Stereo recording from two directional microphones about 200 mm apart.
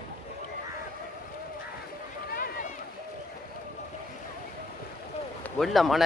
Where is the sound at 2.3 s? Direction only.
45° left (ahead or behind).